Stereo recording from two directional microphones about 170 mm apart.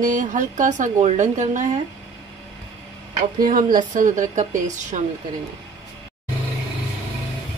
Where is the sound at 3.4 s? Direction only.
55° right (ahead or behind).